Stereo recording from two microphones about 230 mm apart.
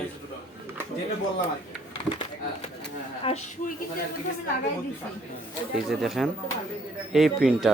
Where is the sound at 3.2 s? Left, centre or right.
Left.